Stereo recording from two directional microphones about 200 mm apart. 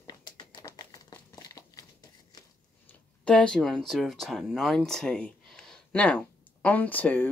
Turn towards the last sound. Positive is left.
turn(degrees=10)  # may be behind; listen again after turning